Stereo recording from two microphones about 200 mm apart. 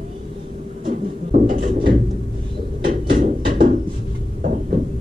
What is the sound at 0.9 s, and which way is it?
Beatboxing, 40° right (ahead or behind).